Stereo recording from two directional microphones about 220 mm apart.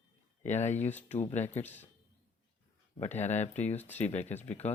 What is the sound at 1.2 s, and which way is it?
Speech, 30° left (ahead or behind).